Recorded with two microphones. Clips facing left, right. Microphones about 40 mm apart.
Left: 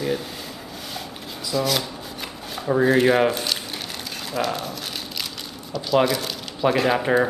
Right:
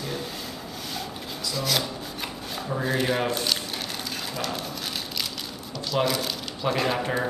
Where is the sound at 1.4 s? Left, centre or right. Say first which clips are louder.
Left 4 dB; centre.